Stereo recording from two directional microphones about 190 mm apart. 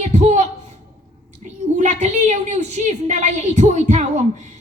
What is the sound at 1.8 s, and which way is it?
A woman's voice, 40° right (ahead or behind).